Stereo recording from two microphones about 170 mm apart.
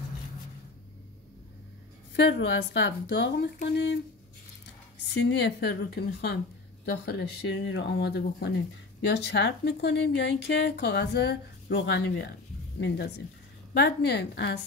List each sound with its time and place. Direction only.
2.1 s a woman's voice: 90° left; by 8.5 s 75° left (ahead or behind)
9.1 s a woman's voice: 90° left
13.7 s speech: 75° left (ahead or behind)